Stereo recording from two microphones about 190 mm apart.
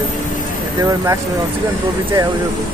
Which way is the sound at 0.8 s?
15° right (ahead or behind).